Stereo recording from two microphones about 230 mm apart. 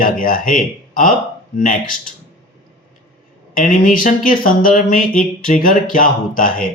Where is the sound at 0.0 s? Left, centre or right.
Left.